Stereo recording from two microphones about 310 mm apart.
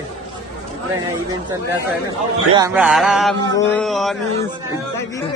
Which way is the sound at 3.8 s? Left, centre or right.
Centre.